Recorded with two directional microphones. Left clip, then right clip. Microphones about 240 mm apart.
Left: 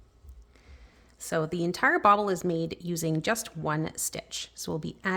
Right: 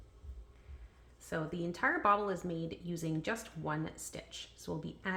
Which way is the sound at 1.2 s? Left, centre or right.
Left.